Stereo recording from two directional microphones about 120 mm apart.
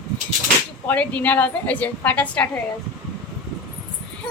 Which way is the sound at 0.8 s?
10° left (ahead or behind).